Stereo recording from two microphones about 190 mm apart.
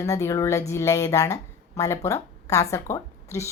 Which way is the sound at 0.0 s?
15° left (ahead or behind).